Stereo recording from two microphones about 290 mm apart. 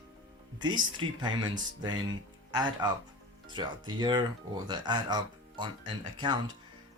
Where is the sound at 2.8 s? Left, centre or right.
Centre.